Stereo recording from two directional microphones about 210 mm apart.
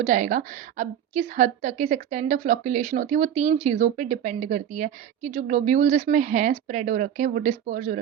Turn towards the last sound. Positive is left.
turn(degrees=-35)  # may be behind; listen again after turning